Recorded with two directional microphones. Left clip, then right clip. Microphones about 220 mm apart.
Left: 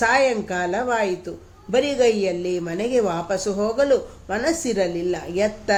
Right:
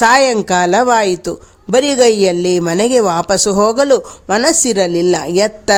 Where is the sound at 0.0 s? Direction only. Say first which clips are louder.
Right 8 dB; 50° right (ahead or behind).